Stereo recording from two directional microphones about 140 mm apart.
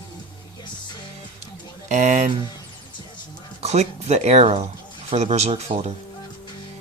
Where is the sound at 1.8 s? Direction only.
55° right (ahead or behind).